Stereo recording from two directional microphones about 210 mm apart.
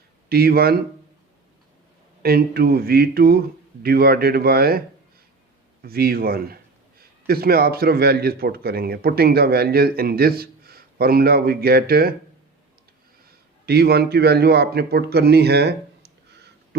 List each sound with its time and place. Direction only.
0.3 s speech: 45° right (ahead or behind)
2.2 s speech: 45° right (ahead or behind)
5.8 s speech: 45° right (ahead or behind)
13.7 s a man's voice: 50° right (ahead or behind)